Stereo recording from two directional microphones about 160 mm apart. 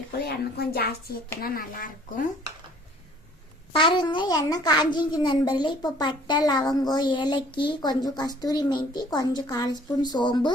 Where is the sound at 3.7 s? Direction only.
30° left (ahead or behind).